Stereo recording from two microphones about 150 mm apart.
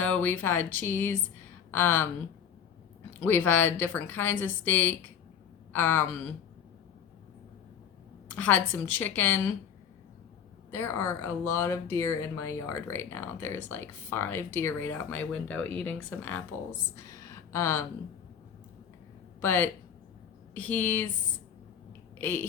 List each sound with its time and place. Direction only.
0.0 s speech: 10° left (ahead or behind)
3.1 s speech: 10° left (ahead or behind)
8.4 s speech: 10° left (ahead or behind)
10.7 s speech: 15° left (ahead or behind)
19.4 s speech: 15° left (ahead or behind)
22.2 s speech: 15° left (ahead or behind)